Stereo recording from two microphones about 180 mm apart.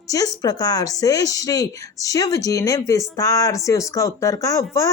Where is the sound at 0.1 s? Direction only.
20° left (ahead or behind).